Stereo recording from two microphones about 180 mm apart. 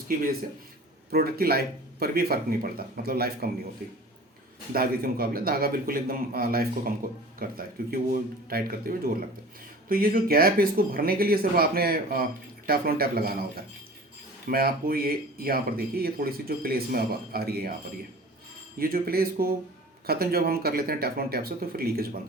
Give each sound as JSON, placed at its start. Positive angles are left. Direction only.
{"t": 1.1, "sound": "speech", "side_deg": -60}
{"t": 4.7, "sound": "speech", "side_deg": -55}
{"t": 18.8, "sound": "speech", "side_deg": -55}